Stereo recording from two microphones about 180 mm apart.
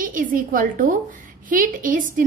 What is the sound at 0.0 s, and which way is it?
A woman's voice, 50° right (ahead or behind).